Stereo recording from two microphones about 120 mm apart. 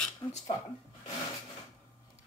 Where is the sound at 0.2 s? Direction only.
35° left (ahead or behind).